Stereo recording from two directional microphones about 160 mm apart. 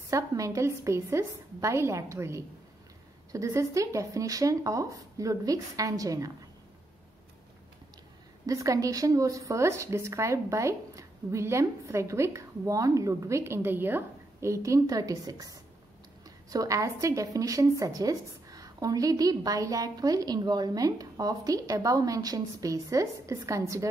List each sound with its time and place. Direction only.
0.1 s a woman's voice: 20° right (ahead or behind)
8.5 s a woman's voice: 20° right (ahead or behind)